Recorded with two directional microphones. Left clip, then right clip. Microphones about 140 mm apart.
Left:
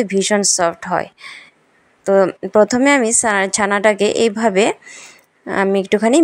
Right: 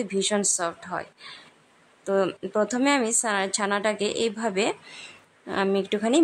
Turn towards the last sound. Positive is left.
turn(degrees=40)  # may be behind; listen again after turning